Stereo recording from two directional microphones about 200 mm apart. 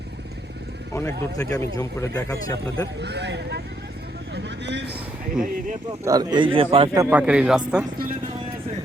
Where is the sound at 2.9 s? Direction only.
60° right (ahead or behind).